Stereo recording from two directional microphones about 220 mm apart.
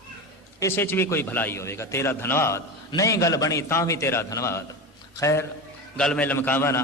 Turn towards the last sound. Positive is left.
turn(degrees=10)  # may be behind; listen again after turning